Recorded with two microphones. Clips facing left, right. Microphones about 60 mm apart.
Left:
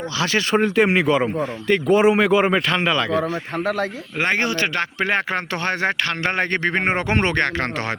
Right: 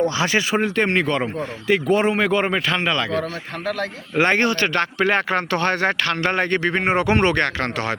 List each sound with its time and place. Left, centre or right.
0.5 s speech: centre
4.4 s speech: centre
6.4 s speech: left